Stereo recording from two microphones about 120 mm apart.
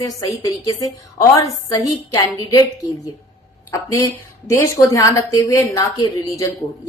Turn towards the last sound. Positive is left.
turn(degrees=30)  # may be behind; listen again after turning